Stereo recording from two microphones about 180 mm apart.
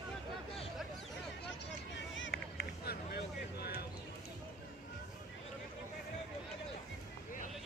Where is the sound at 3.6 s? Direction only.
60° left (ahead or behind).